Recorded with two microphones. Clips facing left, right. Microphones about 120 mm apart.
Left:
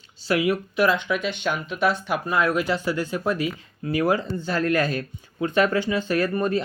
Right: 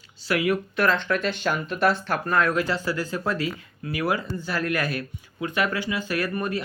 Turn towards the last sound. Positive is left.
turn(degrees=25)  # may be behind; listen again after turning